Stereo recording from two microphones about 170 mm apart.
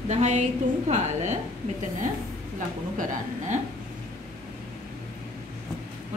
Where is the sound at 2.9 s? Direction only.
50° right (ahead or behind).